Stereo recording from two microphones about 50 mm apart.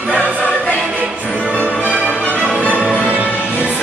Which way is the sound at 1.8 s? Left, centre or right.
Right.